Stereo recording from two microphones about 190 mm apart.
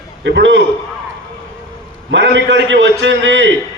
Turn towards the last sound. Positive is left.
turn(degrees=-75)  # may be behind; listen again after turning